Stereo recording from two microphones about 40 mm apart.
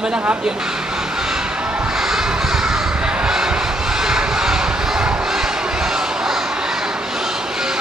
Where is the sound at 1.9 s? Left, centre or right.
Centre.